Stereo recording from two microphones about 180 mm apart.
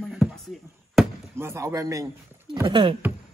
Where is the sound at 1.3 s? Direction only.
15° right (ahead or behind).